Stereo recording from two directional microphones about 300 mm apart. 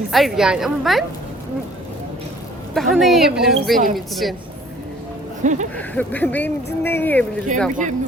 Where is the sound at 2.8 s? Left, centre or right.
Centre.